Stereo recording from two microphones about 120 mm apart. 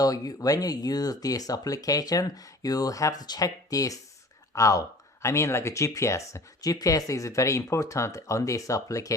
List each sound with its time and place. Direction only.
0.0 s speech: 30° left (ahead or behind)